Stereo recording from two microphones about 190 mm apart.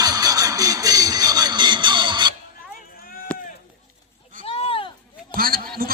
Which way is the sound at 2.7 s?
50° left (ahead or behind).